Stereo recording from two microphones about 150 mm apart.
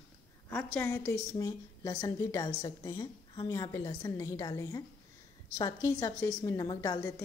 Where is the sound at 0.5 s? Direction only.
15° left (ahead or behind).